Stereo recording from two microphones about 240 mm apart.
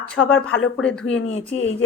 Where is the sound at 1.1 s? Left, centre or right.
Left.